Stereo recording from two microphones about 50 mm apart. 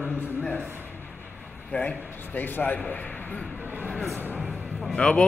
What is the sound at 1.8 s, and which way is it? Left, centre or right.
A man's voice, left.